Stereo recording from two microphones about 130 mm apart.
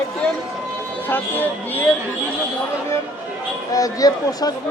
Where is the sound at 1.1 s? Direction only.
15° left (ahead or behind).